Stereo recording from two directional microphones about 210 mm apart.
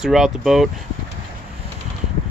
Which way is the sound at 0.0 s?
Centre (ahead or behind).